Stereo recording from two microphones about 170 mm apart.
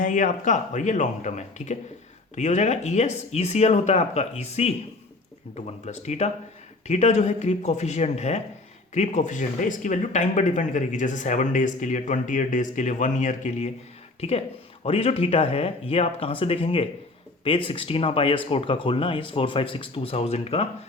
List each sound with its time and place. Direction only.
0.0 s speech: 50° left (ahead or behind)